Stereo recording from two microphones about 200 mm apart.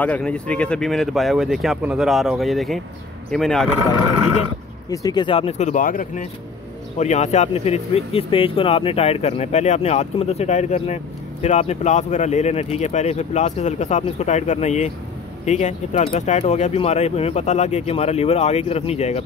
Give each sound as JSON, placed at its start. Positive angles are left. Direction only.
{"t": 0.0, "sound": "speech", "side_deg": 5}
{"t": 4.9, "sound": "speech", "side_deg": 20}